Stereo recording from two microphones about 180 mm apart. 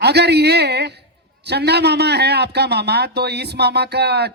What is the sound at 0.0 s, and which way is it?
A man's voice, 65° right (ahead or behind).